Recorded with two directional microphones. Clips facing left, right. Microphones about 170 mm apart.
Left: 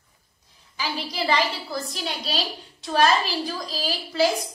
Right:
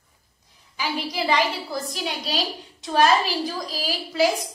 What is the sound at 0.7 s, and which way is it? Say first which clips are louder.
A woman's voice: right 2 dB; 15° right (ahead or behind).